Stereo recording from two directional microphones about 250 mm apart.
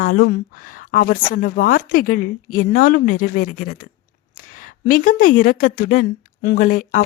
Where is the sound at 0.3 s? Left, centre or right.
Left.